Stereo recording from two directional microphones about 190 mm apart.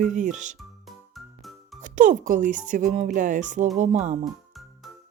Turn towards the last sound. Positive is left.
turn(degrees=0)  # may be behind; listen again after turning